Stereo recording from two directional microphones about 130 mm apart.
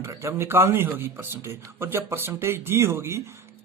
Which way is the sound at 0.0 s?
20° right (ahead or behind).